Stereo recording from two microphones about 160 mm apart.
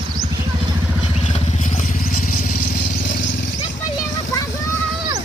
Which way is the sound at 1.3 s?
40° left (ahead or behind).